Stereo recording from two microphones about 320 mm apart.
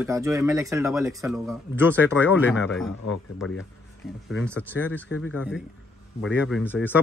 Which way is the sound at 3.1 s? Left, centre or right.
Left.